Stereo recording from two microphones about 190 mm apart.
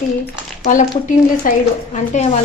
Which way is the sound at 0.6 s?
40° left (ahead or behind).